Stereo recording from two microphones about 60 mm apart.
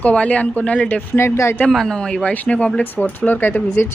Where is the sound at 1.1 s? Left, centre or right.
Left.